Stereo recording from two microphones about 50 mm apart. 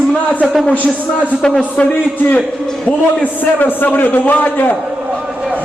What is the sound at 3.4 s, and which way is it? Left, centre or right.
A man's voice, left.